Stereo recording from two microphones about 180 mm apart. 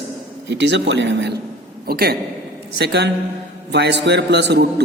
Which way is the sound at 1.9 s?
60° right (ahead or behind).